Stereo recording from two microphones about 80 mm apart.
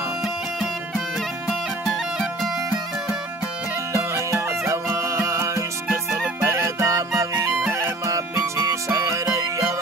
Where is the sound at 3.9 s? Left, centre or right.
Right.